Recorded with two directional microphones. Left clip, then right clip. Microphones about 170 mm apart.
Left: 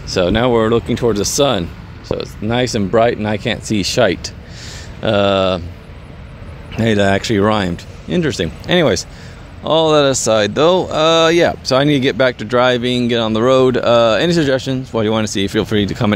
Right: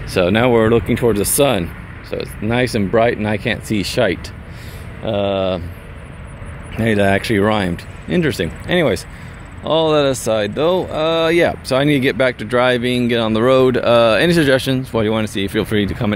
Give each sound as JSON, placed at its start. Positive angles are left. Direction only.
{"t": 0.1, "sound": "speech", "side_deg": 5}
{"t": 5.0, "sound": "speech", "side_deg": 25}
{"t": 6.7, "sound": "speech", "side_deg": 15}